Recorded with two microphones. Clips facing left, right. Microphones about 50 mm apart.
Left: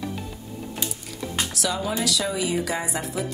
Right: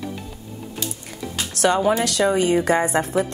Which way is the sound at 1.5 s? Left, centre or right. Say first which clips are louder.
Right 12 dB; right.